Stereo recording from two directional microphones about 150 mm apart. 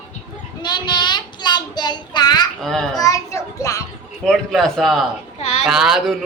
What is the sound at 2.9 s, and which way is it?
Speech, 25° left (ahead or behind).